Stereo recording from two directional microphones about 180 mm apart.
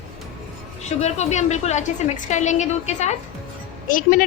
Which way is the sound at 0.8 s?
40° left (ahead or behind).